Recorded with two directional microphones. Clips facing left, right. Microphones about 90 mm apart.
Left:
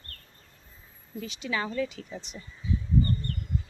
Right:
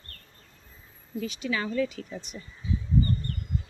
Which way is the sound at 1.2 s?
25° left (ahead or behind).